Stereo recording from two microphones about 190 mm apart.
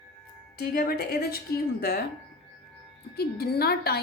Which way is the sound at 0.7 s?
55° left (ahead or behind).